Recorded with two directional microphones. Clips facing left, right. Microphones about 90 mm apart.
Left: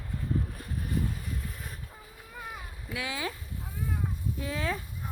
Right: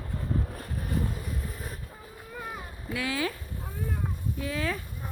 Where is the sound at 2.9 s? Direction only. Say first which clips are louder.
Right 4 dB; 20° left (ahead or behind).